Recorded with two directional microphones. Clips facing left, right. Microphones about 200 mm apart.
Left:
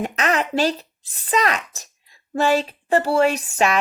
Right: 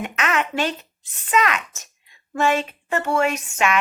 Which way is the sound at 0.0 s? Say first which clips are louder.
Left 2 dB; 35° left (ahead or behind).